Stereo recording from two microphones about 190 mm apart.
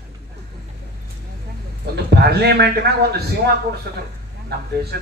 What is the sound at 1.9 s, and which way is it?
Speech, 60° right (ahead or behind).